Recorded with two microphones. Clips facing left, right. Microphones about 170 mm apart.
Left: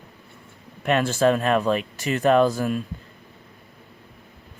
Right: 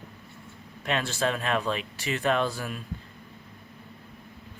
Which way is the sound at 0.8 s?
50° left (ahead or behind).